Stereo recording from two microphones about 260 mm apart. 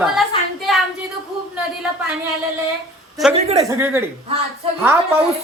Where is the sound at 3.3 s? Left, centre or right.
Right.